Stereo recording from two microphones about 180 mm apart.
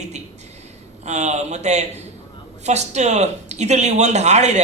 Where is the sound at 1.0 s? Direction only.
40° right (ahead or behind).